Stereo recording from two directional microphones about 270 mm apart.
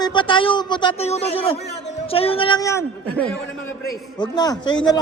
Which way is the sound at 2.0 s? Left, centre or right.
Left.